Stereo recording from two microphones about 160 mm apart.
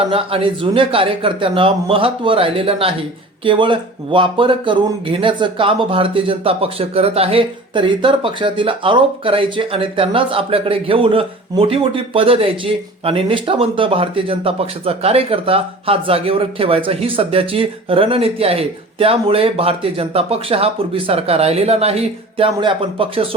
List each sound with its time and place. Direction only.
0.1 s speech: 35° right (ahead or behind)